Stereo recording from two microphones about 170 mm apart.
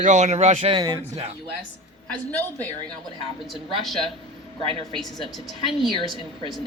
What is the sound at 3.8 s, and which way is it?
A woman's voice, centre (ahead or behind).